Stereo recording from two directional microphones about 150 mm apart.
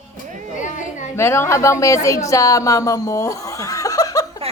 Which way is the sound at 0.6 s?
55° left (ahead or behind).